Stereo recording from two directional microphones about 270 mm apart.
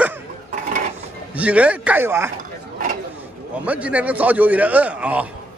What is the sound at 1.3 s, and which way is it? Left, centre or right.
A man's voice, centre.